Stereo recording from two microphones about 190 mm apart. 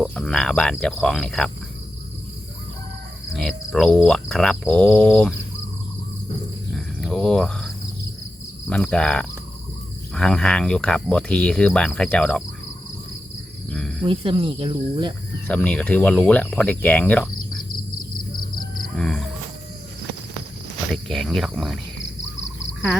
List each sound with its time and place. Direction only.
0.0 s speech: 5° left (ahead or behind)
3.3 s speech: centre (ahead or behind)
6.7 s a sound: 5° left (ahead or behind)
8.7 s speech: 5° left (ahead or behind)
13.7 s speech: 5° left (ahead or behind)
14.0 s speech: 30° right (ahead or behind)
15.4 s speech: 5° left (ahead or behind)
18.9 s speech: 5° left (ahead or behind)
20.8 s speech: centre (ahead or behind)